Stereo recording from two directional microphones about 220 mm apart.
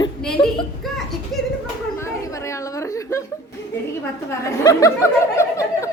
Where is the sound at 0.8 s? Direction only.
Centre (ahead or behind).